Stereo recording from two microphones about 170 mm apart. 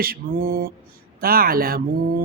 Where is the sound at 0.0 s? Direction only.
60° right (ahead or behind).